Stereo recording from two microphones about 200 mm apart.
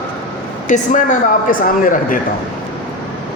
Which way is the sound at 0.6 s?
40° left (ahead or behind).